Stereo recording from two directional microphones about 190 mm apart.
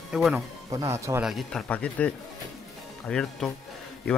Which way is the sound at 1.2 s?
Centre (ahead or behind).